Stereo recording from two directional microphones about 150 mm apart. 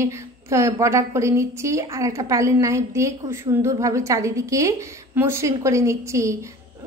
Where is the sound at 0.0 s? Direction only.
20° right (ahead or behind).